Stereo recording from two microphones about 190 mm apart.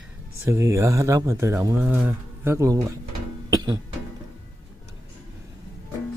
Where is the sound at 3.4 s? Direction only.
20° right (ahead or behind).